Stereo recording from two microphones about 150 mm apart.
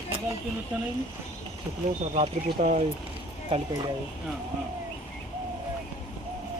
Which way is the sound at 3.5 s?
40° right (ahead or behind).